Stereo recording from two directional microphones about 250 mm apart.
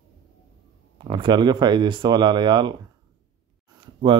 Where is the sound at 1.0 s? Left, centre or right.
Centre.